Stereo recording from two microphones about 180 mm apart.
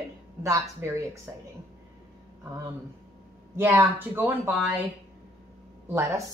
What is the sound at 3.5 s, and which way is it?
Speech, 15° right (ahead or behind).